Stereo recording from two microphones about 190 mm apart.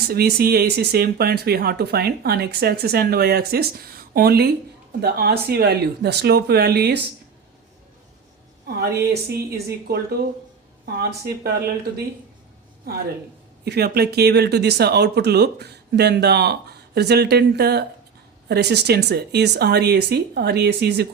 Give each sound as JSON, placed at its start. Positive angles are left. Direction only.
{"t": 0.1, "sound": "speech", "side_deg": -55}
{"t": 8.6, "sound": "a sound", "side_deg": -55}
{"t": 9.3, "sound": "speech", "side_deg": -55}
{"t": 12.8, "sound": "speech", "side_deg": -55}